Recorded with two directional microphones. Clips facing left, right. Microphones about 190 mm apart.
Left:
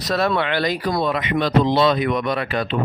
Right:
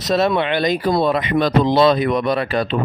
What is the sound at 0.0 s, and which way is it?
A man's voice, 20° right (ahead or behind).